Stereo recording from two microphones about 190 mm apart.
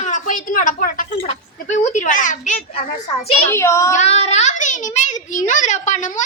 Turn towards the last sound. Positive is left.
turn(degrees=40)  # may be behind; listen again after turning